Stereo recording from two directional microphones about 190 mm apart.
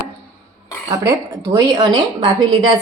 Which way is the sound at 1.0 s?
20° right (ahead or behind).